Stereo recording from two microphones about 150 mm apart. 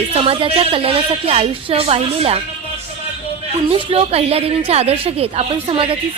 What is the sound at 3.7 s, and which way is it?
A woman's voice, 40° right (ahead or behind).